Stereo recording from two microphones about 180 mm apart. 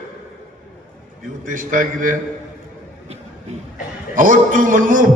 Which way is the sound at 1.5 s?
45° right (ahead or behind).